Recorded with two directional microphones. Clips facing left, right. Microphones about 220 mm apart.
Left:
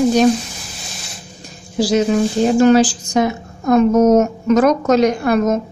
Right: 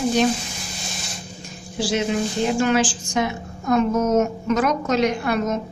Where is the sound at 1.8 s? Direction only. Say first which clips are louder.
Left 7 dB; 40° left (ahead or behind).